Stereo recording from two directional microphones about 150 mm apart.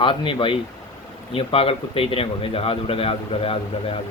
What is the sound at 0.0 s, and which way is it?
A man's voice, 35° left (ahead or behind).